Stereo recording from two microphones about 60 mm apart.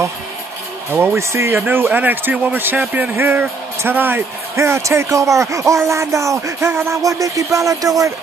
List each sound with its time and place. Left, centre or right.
0.9 s speech: right
1.7 s speech: right
4.6 s speech: right
6.7 s speech: right
7.0 s speech: right